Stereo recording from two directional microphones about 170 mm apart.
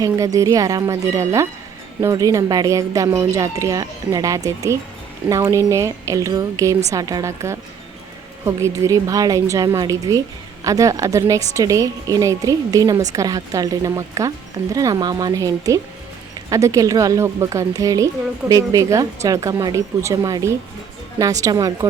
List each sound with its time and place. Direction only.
0.0 s a woman's voice: 20° right (ahead or behind)